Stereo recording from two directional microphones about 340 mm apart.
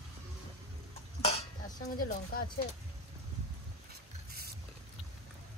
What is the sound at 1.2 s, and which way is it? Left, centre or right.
Dishes, centre.